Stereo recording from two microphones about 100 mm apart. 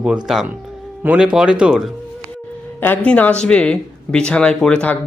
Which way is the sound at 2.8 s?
15° left (ahead or behind).